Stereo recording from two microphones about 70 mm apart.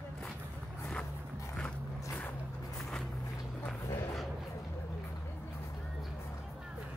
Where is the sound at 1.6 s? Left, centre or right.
Centre.